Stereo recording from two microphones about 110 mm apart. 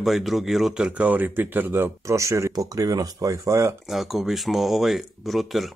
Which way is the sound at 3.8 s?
Centre (ahead or behind).